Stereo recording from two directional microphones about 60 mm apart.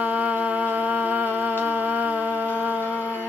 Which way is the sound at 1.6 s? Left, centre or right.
Right.